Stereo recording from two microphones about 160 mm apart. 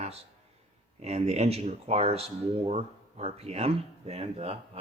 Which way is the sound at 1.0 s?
40° right (ahead or behind).